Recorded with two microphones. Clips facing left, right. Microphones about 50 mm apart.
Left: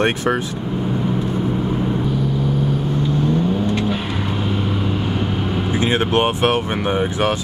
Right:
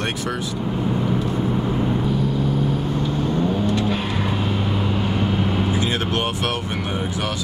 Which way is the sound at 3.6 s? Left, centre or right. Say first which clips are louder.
Left 1 dB; left.